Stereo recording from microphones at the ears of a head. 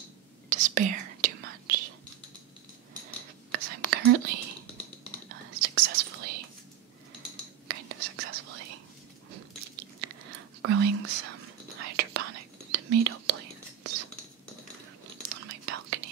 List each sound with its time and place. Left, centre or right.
0.5 s whispering: right
3.5 s whispering: right
7.6 s whispering: right
15.2 s whispering: right